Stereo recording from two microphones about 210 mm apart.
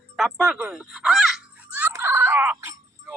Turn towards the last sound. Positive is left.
turn(degrees=-10)  # may be behind; listen again after turning